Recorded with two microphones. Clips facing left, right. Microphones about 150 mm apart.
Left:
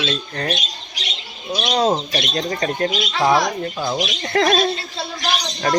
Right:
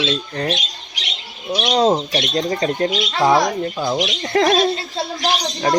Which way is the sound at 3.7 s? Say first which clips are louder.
Right 2 dB; 5° right (ahead or behind).